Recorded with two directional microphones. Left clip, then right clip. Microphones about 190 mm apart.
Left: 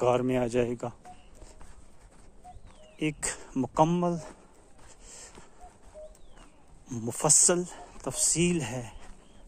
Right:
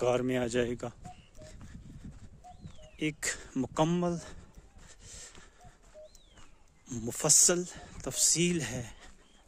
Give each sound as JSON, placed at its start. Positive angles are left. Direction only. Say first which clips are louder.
{"t": 0.0, "sound": "speech", "louder": "left 4 dB", "side_deg": -25}
{"t": 3.0, "sound": "speech", "louder": "left 2 dB", "side_deg": -25}
{"t": 5.0, "sound": "a sound", "louder": "even", "side_deg": -25}
{"t": 6.9, "sound": "speech", "louder": "left 2 dB", "side_deg": -30}